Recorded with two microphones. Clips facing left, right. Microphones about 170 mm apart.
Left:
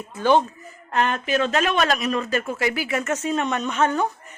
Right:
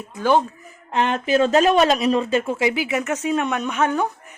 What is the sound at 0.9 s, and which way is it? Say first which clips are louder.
Speech: right 2 dB; 20° right (ahead or behind).